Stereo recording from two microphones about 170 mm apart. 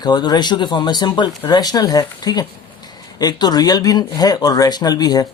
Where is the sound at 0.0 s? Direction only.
25° left (ahead or behind).